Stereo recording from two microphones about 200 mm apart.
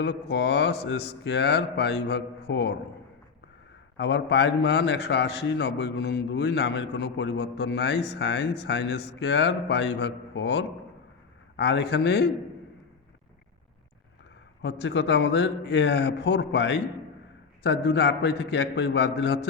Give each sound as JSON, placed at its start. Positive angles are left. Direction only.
{"t": 0.0, "sound": "a man's voice", "side_deg": 55}
{"t": 3.9, "sound": "a man's voice", "side_deg": 60}
{"t": 14.6, "sound": "a man's voice", "side_deg": 60}